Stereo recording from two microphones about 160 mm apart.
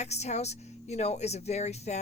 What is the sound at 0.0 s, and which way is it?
Speech, 45° left (ahead or behind).